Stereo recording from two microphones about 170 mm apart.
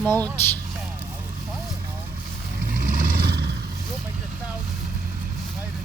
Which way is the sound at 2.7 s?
55° right (ahead or behind).